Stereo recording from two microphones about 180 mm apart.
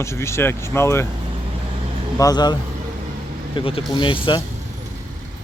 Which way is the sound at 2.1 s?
20° left (ahead or behind).